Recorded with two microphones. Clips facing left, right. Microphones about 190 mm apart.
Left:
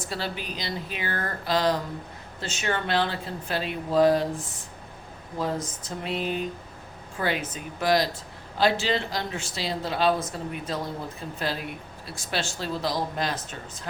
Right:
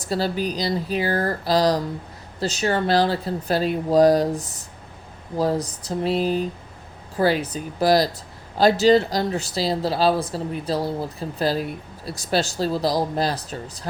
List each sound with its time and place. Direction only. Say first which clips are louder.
0.0 s speech: right 9 dB; 40° right (ahead or behind)